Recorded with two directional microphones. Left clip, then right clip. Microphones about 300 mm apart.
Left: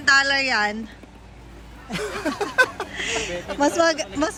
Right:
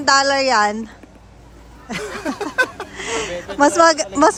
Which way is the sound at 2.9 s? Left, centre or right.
Right.